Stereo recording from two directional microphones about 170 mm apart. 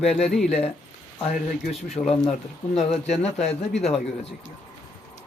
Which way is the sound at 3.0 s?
40° left (ahead or behind).